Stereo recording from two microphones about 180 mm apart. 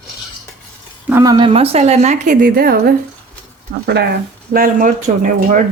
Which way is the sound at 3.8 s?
60° right (ahead or behind).